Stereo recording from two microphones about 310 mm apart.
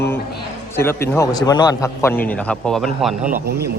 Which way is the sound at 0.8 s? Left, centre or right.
Centre.